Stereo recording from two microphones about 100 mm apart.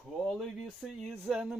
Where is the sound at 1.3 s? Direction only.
10° right (ahead or behind).